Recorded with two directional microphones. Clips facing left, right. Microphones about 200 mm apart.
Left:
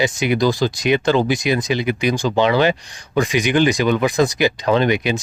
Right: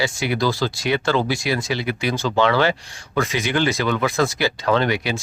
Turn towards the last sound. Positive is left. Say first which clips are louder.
# left 3 dB
turn(degrees=20)  # may be behind; listen again after turning